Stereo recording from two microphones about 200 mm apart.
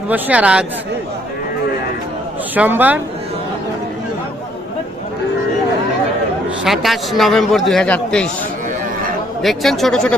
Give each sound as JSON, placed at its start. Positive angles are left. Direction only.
{"t": 0.1, "sound": "speech", "side_deg": -5}
{"t": 2.6, "sound": "speech", "side_deg": -10}
{"t": 6.7, "sound": "a man's voice", "side_deg": 0}
{"t": 9.4, "sound": "a man's voice", "side_deg": 0}